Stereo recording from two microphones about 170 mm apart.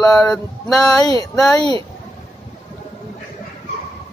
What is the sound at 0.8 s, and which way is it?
Speech, 20° left (ahead or behind).